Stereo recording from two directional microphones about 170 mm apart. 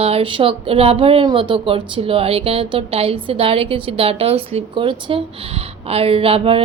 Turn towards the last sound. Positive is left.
turn(degrees=-35)  # may be behind; listen again after turning